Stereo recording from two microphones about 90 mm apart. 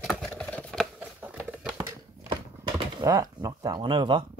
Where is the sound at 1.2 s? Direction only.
20° right (ahead or behind).